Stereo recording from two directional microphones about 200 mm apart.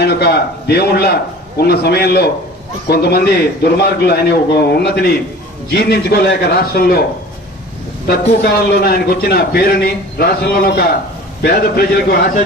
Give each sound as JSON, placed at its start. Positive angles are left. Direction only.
{"t": 0.0, "sound": "a man's voice", "side_deg": 55}
{"t": 8.1, "sound": "a man's voice", "side_deg": 55}